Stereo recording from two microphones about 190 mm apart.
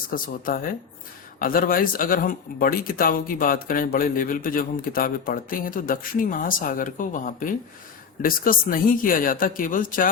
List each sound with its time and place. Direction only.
0.1 s speech: 50° left (ahead or behind)